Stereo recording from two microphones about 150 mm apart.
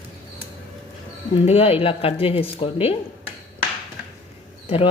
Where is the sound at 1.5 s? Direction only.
40° left (ahead or behind).